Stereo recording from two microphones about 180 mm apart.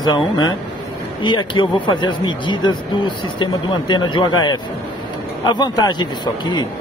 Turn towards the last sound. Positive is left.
turn(degrees=25)  # may be behind; listen again after turning